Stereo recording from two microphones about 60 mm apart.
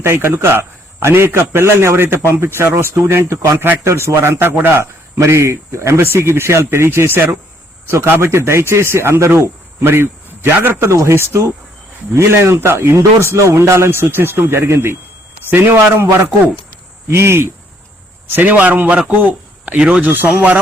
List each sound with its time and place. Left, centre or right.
0.0 s a man's voice: right
3.2 s speech: right
3.8 s a man's voice: right
13.0 s a man's voice: right
15.4 s speech: right
17.1 s a man's voice: right
18.3 s a man's voice: right
20.1 s speech: right